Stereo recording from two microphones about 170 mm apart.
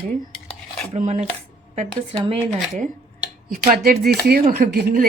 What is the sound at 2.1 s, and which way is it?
Speech, 30° right (ahead or behind).